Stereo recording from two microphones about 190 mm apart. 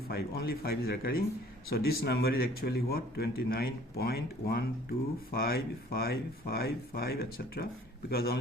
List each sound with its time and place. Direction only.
0.1 s speech: 55° left (ahead or behind)